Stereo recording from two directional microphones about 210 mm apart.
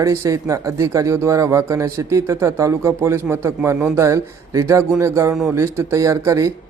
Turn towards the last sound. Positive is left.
turn(degrees=-15)  # may be behind; listen again after turning